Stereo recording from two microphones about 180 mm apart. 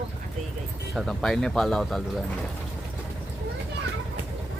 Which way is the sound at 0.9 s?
Centre (ahead or behind).